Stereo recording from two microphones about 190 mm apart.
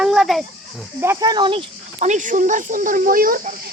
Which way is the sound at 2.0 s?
40° right (ahead or behind).